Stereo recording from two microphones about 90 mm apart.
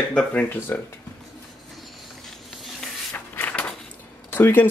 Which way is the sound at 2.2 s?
5° left (ahead or behind).